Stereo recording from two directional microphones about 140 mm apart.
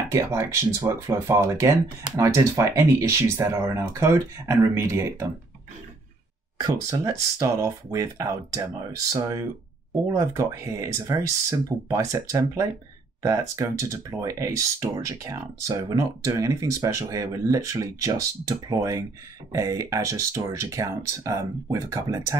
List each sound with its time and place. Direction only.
0.1 s speech: 20° right (ahead or behind)
6.6 s speech: 25° right (ahead or behind)